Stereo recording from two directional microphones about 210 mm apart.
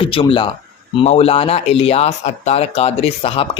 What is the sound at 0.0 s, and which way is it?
A man's voice, 25° left (ahead or behind).